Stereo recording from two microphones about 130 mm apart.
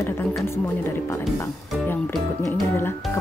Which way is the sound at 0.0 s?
20° left (ahead or behind).